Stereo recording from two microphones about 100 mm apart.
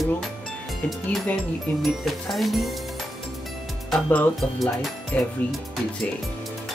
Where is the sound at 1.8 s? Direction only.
Centre (ahead or behind).